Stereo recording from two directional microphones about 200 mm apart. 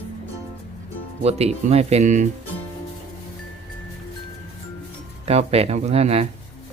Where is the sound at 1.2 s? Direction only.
30° right (ahead or behind).